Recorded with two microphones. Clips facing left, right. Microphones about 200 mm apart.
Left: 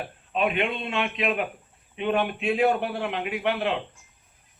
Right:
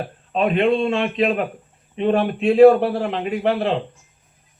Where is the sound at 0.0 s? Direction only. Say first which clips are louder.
Right 5 dB; 35° right (ahead or behind).